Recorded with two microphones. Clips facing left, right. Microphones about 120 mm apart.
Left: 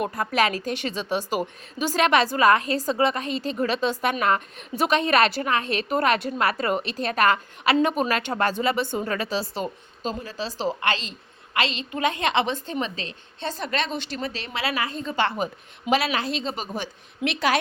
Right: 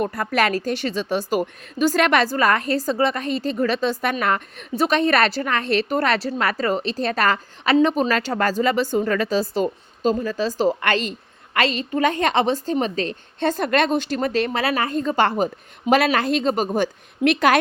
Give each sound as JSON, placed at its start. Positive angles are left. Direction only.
{"t": 0.1, "sound": "a woman's voice", "side_deg": -55}